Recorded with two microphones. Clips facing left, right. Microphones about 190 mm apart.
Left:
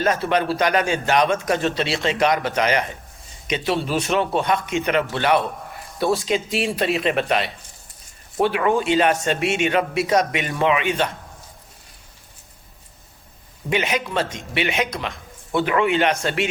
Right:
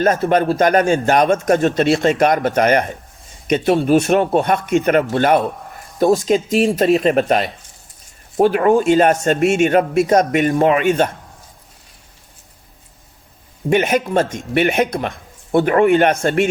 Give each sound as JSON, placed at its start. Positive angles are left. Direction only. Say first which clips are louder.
{"t": 0.0, "sound": "a man's voice", "louder": "right 5 dB", "side_deg": -45}
{"t": 13.7, "sound": "a man's voice", "louder": "right 7 dB", "side_deg": -50}